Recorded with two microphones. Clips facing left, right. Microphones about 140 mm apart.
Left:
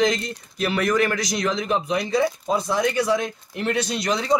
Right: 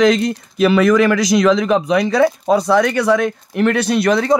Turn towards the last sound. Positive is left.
turn(degrees=-60)  # may be behind; listen again after turning